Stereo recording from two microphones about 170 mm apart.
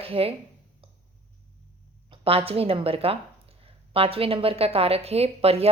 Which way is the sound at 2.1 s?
35° right (ahead or behind).